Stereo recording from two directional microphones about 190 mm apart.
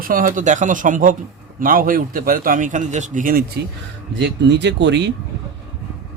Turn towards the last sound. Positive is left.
turn(degrees=-65)  # may be behind; listen again after turning